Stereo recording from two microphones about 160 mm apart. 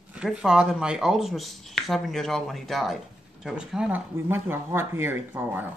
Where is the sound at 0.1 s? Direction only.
5° right (ahead or behind).